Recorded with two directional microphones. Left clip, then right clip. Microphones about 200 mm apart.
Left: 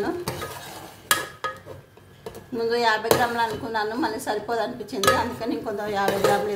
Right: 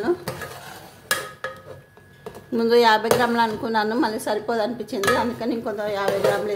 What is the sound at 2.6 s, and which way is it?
A woman's voice, 50° right (ahead or behind).